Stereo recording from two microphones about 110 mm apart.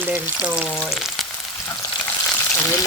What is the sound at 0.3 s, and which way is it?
Speech, 10° right (ahead or behind).